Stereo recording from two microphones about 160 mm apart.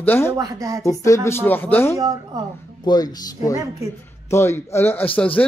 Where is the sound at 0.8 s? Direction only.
20° left (ahead or behind).